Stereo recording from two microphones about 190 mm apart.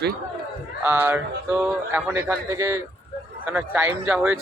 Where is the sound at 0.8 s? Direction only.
10° right (ahead or behind).